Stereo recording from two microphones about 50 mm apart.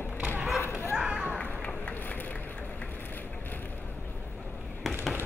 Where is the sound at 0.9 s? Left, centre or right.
Centre.